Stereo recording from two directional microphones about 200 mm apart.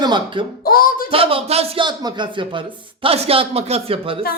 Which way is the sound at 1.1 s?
25° right (ahead or behind).